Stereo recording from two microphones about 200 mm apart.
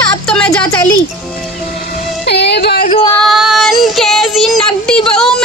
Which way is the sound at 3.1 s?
Centre (ahead or behind).